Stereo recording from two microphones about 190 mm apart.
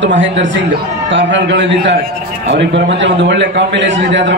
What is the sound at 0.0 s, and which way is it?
A man's voice, 75° right (ahead or behind).